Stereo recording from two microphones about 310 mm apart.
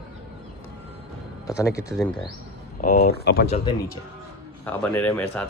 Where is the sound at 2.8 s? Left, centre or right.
Left.